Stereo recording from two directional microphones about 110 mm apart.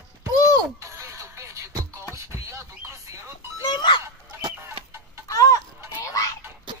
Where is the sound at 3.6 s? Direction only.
40° left (ahead or behind).